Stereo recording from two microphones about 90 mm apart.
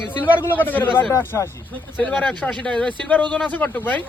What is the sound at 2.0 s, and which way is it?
Speech, 10° left (ahead or behind).